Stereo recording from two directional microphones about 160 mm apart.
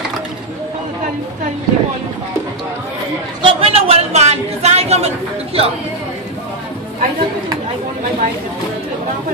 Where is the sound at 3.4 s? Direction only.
35° right (ahead or behind).